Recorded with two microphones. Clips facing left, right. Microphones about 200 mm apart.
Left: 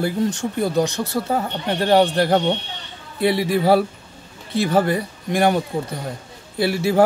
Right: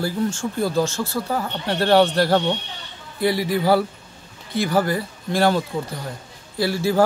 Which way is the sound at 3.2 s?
25° left (ahead or behind).